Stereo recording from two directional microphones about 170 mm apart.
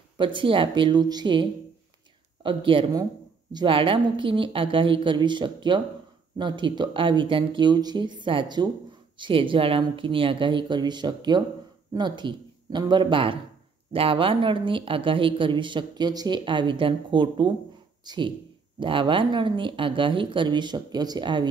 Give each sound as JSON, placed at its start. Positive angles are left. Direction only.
{"t": 0.2, "sound": "speech", "side_deg": -30}